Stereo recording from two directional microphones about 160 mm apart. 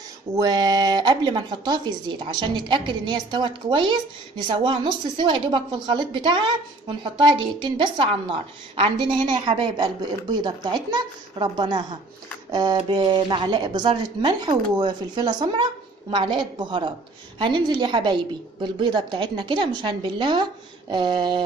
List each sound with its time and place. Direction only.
0.4 s a woman's voice: 25° right (ahead or behind)